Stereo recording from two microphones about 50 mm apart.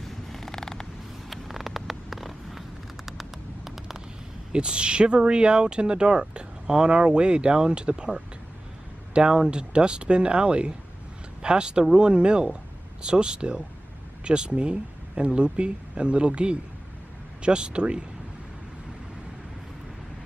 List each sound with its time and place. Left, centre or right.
0.0 s creak: centre
1.3 s vehicle: centre
4.5 s speech: centre